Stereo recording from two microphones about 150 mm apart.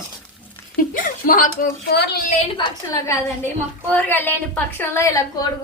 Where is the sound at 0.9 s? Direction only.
60° left (ahead or behind); by 2.2 s 90° left.